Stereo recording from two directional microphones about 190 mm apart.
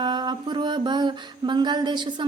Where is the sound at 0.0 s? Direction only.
25° right (ahead or behind).